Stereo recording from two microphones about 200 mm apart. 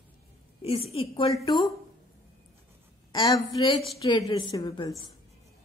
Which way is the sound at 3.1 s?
20° left (ahead or behind).